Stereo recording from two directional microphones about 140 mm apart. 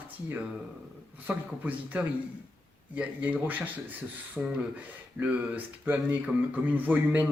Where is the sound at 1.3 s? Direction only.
10° right (ahead or behind).